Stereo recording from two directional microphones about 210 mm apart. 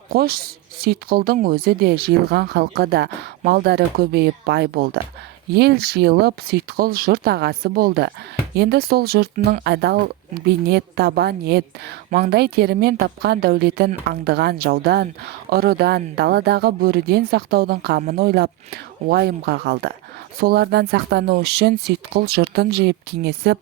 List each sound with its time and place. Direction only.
0.1 s a woman's voice: 45° right (ahead or behind)
9.6 s a woman's voice: 50° right (ahead or behind)